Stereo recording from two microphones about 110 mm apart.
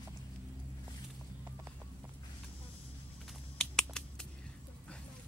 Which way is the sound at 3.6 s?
5° left (ahead or behind).